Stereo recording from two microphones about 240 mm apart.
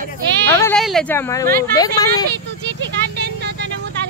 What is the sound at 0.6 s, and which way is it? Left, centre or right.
Speech, centre.